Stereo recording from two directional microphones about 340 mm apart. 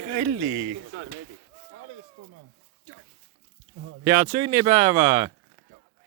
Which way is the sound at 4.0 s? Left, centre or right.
Centre.